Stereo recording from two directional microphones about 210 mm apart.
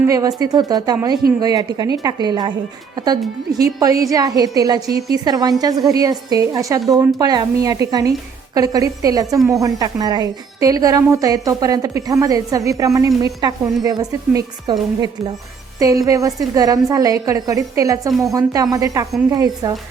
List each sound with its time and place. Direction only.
0.0 s a woman's voice: 15° right (ahead or behind)
4.9 s a woman's voice: 50° right (ahead or behind)
5.1 s a woman's voice: 20° right (ahead or behind)
15.8 s a woman's voice: 15° right (ahead or behind)